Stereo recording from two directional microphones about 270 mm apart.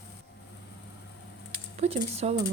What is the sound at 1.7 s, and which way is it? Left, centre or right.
Speech, right.